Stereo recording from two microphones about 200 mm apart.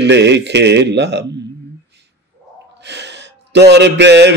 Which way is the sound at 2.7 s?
60° right (ahead or behind).